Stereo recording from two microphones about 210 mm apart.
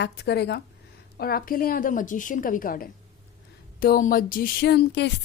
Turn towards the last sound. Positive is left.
turn(degrees=55)  # may be behind; listen again after turning